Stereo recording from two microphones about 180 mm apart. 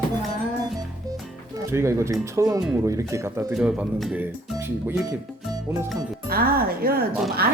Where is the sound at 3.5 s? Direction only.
5° right (ahead or behind).